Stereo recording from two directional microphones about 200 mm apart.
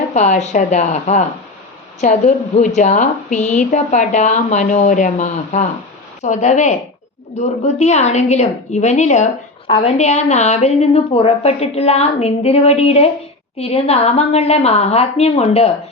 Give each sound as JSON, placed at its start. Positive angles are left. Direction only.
{"t": 0.1, "sound": "a woman's voice", "side_deg": 35}